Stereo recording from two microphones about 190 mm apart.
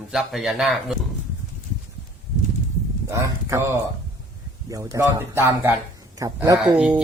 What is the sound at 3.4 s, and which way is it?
A man's voice, 15° right (ahead or behind).